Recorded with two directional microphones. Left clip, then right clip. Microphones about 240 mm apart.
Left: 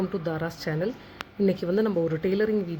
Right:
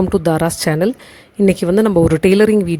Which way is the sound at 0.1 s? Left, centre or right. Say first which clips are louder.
Right 15 dB; right.